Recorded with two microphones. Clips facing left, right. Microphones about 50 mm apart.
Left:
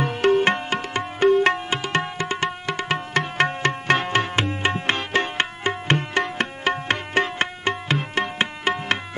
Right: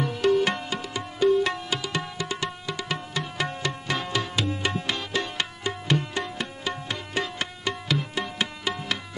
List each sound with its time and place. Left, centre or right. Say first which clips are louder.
0.0 s music: left 4 dB; left